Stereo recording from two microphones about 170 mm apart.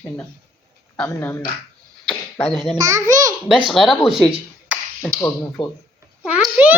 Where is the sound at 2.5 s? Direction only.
Centre (ahead or behind).